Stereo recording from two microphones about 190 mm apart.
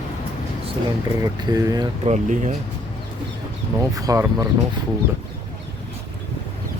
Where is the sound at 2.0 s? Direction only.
40° right (ahead or behind).